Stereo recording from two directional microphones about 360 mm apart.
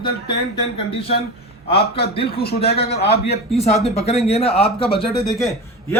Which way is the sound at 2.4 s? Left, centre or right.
Left.